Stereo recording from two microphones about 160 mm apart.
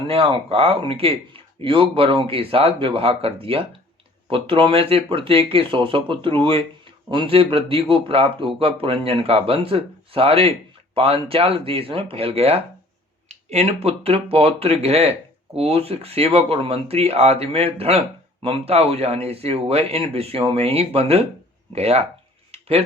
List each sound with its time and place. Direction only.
0.1 s speech: 35° right (ahead or behind)